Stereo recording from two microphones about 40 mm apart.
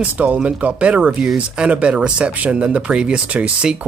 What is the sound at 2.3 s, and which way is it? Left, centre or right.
Speech, right.